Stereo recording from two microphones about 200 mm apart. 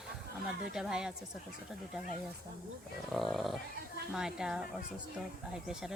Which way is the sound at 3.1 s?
Centre (ahead or behind).